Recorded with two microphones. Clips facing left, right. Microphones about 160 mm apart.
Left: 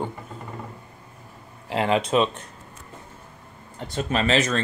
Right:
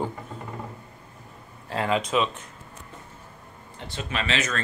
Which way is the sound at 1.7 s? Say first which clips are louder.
Left 3 dB; 20° left (ahead or behind).